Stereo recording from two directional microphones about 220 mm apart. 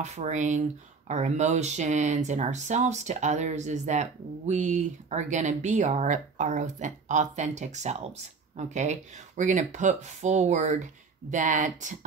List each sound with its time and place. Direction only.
0.0 s speech: 30° right (ahead or behind)